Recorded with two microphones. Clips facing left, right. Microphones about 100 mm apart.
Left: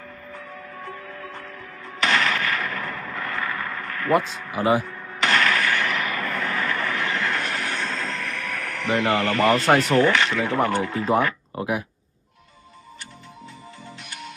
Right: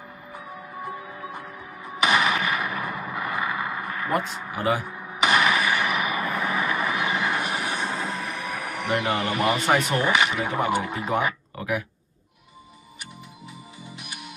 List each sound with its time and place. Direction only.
0.3 s music: 15° right (ahead or behind)
4.8 s a sound: 15° right (ahead or behind)
9.8 s speech: 15° right (ahead or behind)
11.5 s speech: 30° left (ahead or behind)
13.8 s music: 10° right (ahead or behind)